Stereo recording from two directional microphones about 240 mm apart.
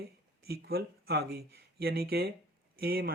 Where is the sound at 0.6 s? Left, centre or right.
Right.